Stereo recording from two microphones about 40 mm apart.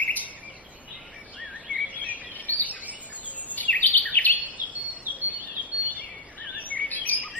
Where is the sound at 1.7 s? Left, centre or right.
Left.